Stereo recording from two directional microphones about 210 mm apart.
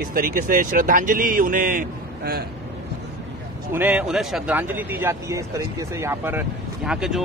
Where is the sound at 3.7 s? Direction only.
5° right (ahead or behind).